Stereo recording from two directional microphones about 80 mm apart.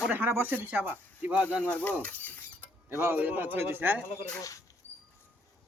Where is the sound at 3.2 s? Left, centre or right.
Right.